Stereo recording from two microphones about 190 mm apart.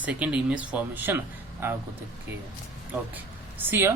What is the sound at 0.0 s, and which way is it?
A woman's voice, 5° right (ahead or behind).